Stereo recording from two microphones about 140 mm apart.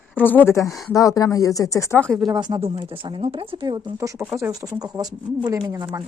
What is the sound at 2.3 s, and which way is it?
Speech, 30° right (ahead or behind).